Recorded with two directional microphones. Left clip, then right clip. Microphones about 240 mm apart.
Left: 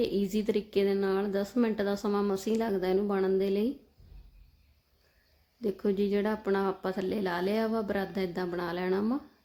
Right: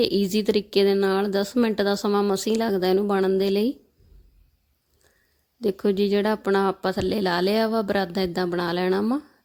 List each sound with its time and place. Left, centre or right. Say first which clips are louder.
0.0 s speech: right 8 dB; right
5.5 s speech: right 7 dB; right